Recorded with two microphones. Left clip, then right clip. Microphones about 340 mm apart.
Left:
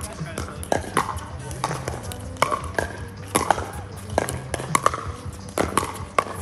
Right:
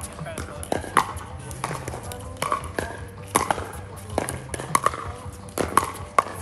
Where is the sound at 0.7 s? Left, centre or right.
Left.